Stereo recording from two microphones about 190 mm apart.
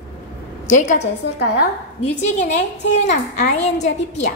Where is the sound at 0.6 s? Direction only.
40° left (ahead or behind).